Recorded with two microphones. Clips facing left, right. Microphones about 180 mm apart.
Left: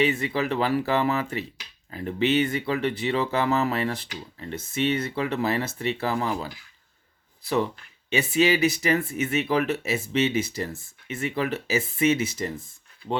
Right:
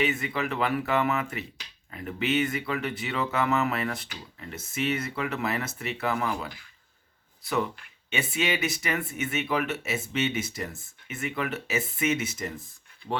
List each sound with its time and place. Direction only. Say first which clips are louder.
0.0 s speech: left 4 dB; 35° left (ahead or behind)